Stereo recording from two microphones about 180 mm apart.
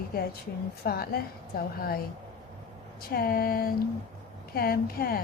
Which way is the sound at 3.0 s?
55° left (ahead or behind).